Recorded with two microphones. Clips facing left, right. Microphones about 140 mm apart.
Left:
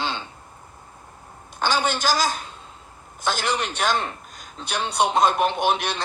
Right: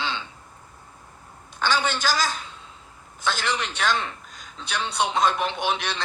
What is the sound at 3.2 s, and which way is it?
A man's voice, 45° left (ahead or behind).